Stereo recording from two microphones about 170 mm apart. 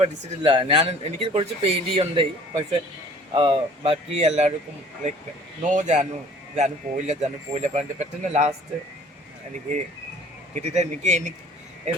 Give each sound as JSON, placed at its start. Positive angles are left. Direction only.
{"t": 0.0, "sound": "speech", "side_deg": -35}
{"t": 5.7, "sound": "a man's voice", "side_deg": -45}
{"t": 10.5, "sound": "a man's voice", "side_deg": -45}